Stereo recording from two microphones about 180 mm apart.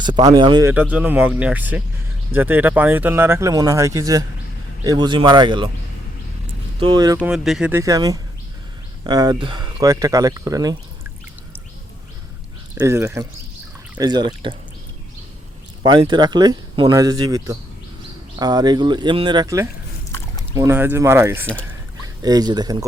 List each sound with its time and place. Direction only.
0.0 s speech: 25° right (ahead or behind)
0.7 s speech: 10° right (ahead or behind); by 5.6 s 25° right (ahead or behind)
6.7 s speech: 25° right (ahead or behind)
7.3 s speech: centre (ahead or behind)
7.7 s speech: 15° right (ahead or behind)
12.7 s speech: 15° right (ahead or behind)
15.8 s speech: 25° right (ahead or behind)